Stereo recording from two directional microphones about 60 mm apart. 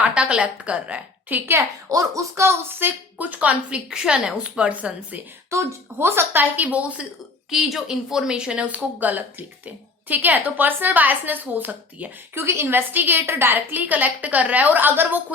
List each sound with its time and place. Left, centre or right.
0.0 s a woman's voice: centre
1.4 s a woman's voice: right
1.9 s a woman's voice: right
3.8 s speech: centre
5.5 s speech: right
6.1 s a woman's voice: right
6.6 s a woman's voice: right
7.5 s a woman's voice: centre; by 12.1 s right
12.3 s speech: right
12.7 s a woman's voice: right